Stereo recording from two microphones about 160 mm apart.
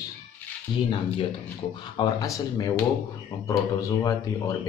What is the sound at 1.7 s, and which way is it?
Speech, 30° left (ahead or behind).